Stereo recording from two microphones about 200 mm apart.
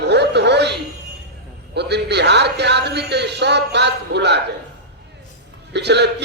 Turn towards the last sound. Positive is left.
turn(degrees=-60)  # may be behind; listen again after turning